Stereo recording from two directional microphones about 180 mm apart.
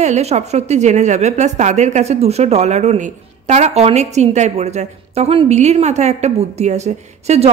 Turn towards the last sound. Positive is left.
turn(degrees=-40)  # may be behind; listen again after turning